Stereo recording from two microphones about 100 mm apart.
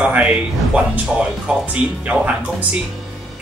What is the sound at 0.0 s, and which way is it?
Speech, 10° right (ahead or behind).